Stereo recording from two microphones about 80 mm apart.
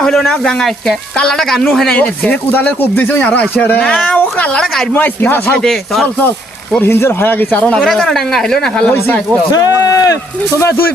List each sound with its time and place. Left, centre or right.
0.0 s speech: centre
2.0 s speech: centre
4.9 s speech: left
5.6 s speech: centre
6.7 s speech: left
7.6 s speech: centre
8.9 s speech: left
9.5 s speech: left